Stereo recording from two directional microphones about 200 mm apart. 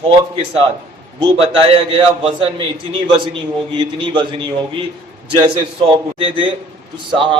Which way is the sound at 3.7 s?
25° right (ahead or behind).